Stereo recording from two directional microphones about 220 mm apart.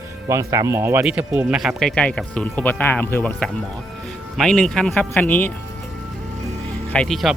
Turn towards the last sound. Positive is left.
turn(degrees=0)  # may be behind; listen again after turning